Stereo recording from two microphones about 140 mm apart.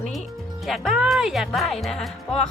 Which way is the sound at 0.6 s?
Centre (ahead or behind).